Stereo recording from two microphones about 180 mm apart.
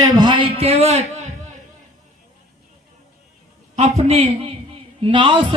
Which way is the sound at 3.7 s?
35° right (ahead or behind).